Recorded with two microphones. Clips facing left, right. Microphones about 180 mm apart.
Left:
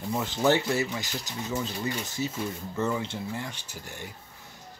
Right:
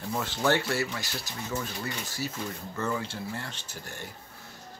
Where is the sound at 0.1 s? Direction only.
15° left (ahead or behind).